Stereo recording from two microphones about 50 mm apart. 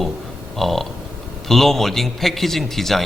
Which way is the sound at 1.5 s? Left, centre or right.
Centre.